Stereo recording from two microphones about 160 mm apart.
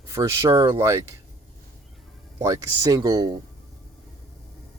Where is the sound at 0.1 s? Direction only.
20° right (ahead or behind).